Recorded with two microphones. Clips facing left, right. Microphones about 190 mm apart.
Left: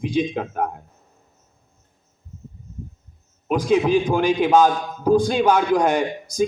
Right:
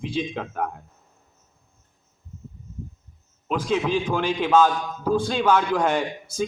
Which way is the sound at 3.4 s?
15° left (ahead or behind).